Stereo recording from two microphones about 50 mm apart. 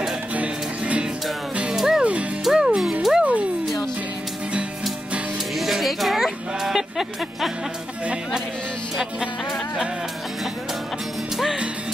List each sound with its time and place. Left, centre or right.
0.3 s music: right
1.8 s music: centre
5.6 s music: centre